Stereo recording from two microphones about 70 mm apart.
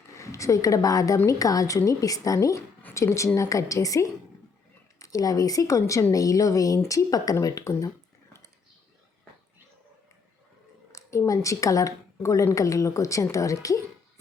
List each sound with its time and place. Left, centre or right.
0.2 s a woman's voice: left
2.9 s a woman's voice: left
10.9 s a woman's voice: left